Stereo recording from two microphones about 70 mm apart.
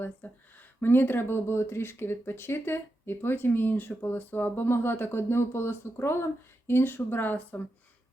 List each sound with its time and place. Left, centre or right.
0.2 s speech: left